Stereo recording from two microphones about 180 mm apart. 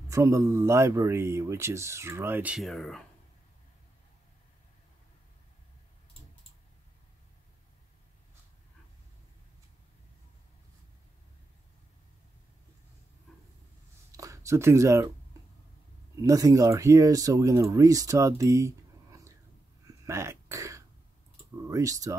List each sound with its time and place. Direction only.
0.1 s speech: 15° right (ahead or behind); by 3.0 s centre (ahead or behind)
14.1 s a sound: 15° right (ahead or behind)
16.2 s speech: 20° right (ahead or behind)
19.8 s throat clearing: 15° right (ahead or behind)
21.6 s speech: 20° right (ahead or behind)